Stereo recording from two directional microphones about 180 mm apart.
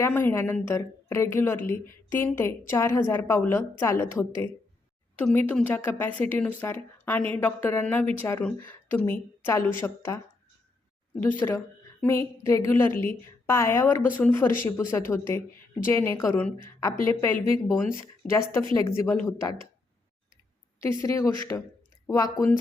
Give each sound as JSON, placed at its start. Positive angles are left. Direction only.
{"t": 0.0, "sound": "a woman's voice", "side_deg": 10}
{"t": 11.2, "sound": "a woman's voice", "side_deg": 10}
{"t": 20.8, "sound": "a woman's voice", "side_deg": 20}